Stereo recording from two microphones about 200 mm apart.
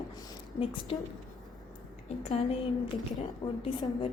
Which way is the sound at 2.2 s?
30° left (ahead or behind).